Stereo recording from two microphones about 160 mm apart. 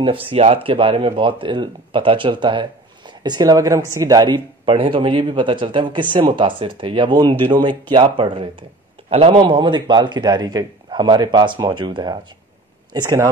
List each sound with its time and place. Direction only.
0.0 s a man's voice: 35° right (ahead or behind)